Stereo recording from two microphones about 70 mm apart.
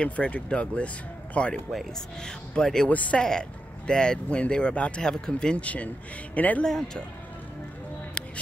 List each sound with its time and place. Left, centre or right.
0.0 s speech: centre
1.7 s speech: centre
2.9 s speech: centre
6.6 s speech: centre
8.2 s music: centre